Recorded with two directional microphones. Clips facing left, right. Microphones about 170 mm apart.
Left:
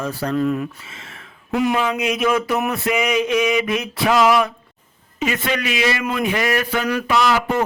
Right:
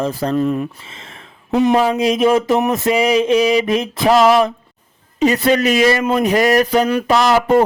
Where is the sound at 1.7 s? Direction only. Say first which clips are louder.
Right 6 dB; 35° right (ahead or behind).